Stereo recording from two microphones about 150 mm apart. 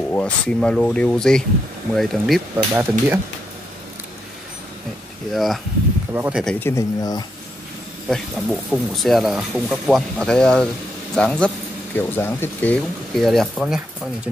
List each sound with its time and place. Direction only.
0.1 s speech: 5° left (ahead or behind)
2.5 s speech: 15° right (ahead or behind)
5.3 s speech: centre (ahead or behind)
6.1 s speech: 15° right (ahead or behind)
6.6 s speech: 20° left (ahead or behind)
8.1 s speech: centre (ahead or behind)